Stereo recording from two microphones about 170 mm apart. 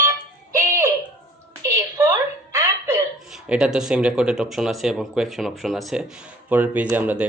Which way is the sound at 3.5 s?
5° right (ahead or behind).